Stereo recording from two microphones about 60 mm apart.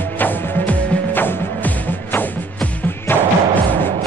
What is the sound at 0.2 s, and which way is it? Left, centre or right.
Music, left.